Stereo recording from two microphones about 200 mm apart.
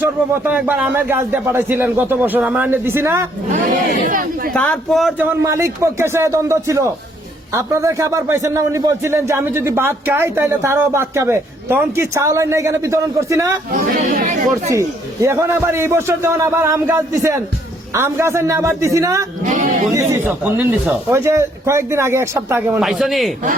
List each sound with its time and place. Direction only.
0.0 s a man's voice: 10° right (ahead or behind)
4.0 s speech: 45° right (ahead or behind)
4.5 s a man's voice: 5° left (ahead or behind); by 13.6 s 15° right (ahead or behind)
13.7 s speech: 40° right (ahead or behind)
14.7 s a man's voice: 15° right (ahead or behind)
19.5 s speech: 40° right (ahead or behind)
19.9 s a man's voice: 15° right (ahead or behind)